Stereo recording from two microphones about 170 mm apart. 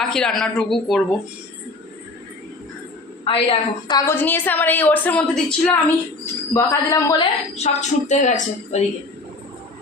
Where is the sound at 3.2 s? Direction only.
30° left (ahead or behind).